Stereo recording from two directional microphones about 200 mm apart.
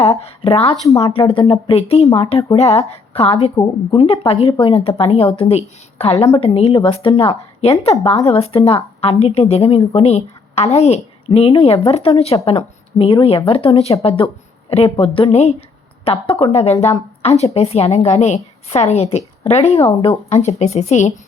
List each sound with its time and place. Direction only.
0.0 s a woman's voice: 30° left (ahead or behind)